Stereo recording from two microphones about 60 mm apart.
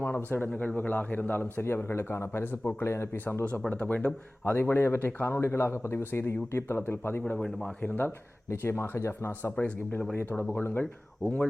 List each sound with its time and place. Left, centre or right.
0.0 s speech: left
1.6 s a man's voice: left
3.7 s speech: left
4.5 s a man's voice: left
7.3 s speech: centre
7.8 s speech: left
8.4 s a man's voice: left
9.6 s speech: left